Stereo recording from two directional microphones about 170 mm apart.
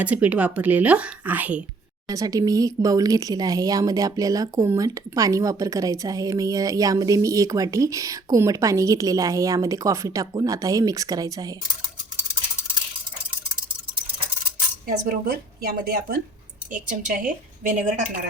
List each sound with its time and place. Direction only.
0.0 s a woman's voice: 10° right (ahead or behind)
2.0 s speech: 20° right (ahead or behind)
15.3 s a woman's voice: 65° right (ahead or behind); by 18.0 s 50° right (ahead or behind)